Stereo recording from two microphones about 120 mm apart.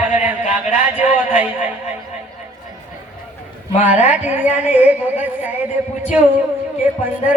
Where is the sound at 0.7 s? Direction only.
75° left (ahead or behind).